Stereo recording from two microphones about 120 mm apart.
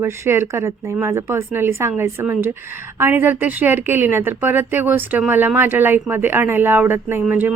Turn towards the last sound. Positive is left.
turn(degrees=-15)  # may be behind; listen again after turning